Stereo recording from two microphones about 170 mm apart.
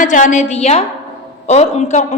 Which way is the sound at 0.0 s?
50° left (ahead or behind).